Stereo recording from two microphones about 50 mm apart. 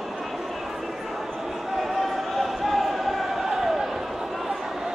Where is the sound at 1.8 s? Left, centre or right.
Centre.